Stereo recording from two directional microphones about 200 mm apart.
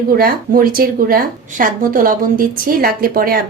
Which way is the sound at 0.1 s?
45° right (ahead or behind).